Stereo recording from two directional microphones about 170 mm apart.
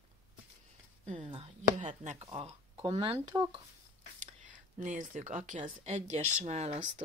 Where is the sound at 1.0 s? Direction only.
35° right (ahead or behind).